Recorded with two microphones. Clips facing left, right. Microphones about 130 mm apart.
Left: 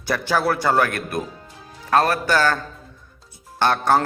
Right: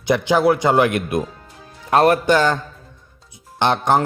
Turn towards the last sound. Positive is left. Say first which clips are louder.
# right 1 dB
turn(degrees=-20)  # may be behind; listen again after turning